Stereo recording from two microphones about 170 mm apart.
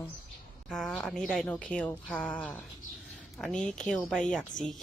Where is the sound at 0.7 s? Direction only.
5° left (ahead or behind).